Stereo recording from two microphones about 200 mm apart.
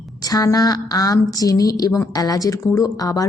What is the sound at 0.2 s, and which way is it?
A woman's voice, 20° left (ahead or behind).